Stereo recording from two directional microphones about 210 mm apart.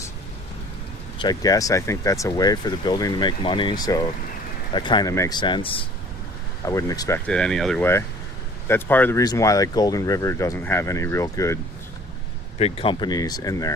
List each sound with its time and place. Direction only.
1.2 s speech: 20° left (ahead or behind)
7.3 s speech: 5° left (ahead or behind)
12.5 s speech: 30° left (ahead or behind)